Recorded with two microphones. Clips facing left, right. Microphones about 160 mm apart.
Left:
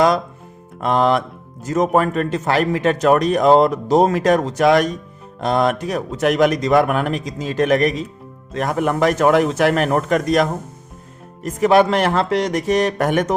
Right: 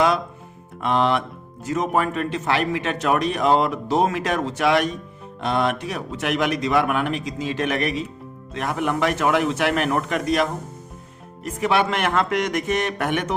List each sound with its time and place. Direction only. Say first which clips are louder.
0.8 s speech: left 4 dB; 40° left (ahead or behind)